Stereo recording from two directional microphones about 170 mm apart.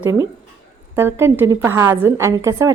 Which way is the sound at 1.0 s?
15° right (ahead or behind).